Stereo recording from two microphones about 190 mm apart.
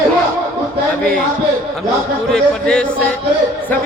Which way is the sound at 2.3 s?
5° left (ahead or behind).